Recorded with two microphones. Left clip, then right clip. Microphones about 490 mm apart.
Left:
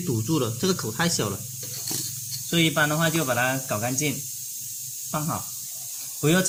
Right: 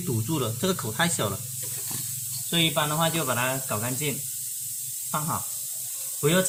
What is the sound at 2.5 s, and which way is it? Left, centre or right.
Speech, right.